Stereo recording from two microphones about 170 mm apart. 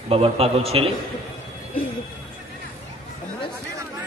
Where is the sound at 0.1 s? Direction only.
35° right (ahead or behind).